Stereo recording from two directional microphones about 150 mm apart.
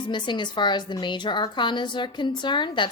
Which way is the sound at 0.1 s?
30° left (ahead or behind).